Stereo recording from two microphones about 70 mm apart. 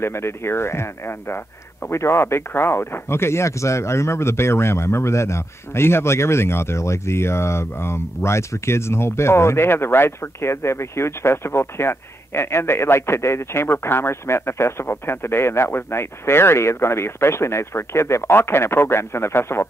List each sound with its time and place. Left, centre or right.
0.0 s speech: left